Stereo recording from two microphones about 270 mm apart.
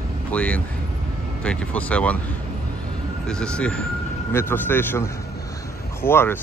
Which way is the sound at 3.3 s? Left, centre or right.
Centre.